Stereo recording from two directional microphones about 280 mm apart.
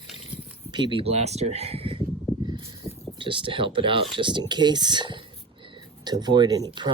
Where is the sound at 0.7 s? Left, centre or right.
Centre.